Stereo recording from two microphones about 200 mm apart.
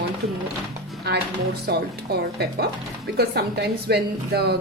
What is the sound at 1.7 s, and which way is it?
Speech, 55° right (ahead or behind).